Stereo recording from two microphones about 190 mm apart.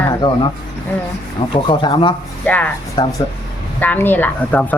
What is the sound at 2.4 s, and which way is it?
Speech, 5° left (ahead or behind).